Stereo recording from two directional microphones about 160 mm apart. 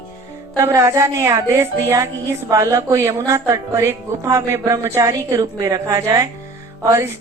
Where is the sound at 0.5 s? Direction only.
20° right (ahead or behind).